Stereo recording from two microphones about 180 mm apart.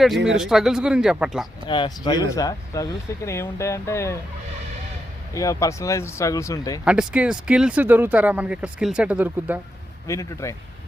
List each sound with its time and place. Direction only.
0.3 s speech: 5° right (ahead or behind)
1.6 s speech: 25° left (ahead or behind)
5.3 s speech: 20° left (ahead or behind)
6.8 s speech: 5° right (ahead or behind)
10.1 s speech: 15° left (ahead or behind)